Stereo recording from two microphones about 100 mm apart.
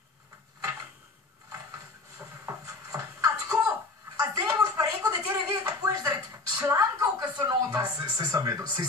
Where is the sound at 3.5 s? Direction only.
15° right (ahead or behind).